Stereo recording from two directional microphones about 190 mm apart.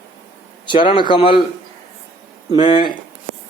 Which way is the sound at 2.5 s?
25° left (ahead or behind).